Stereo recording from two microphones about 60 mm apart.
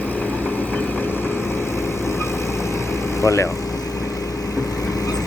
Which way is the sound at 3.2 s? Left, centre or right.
Left.